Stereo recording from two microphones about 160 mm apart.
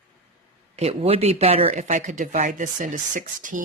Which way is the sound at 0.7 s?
40° right (ahead or behind).